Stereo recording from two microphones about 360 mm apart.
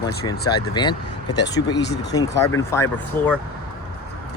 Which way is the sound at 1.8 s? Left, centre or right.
Left.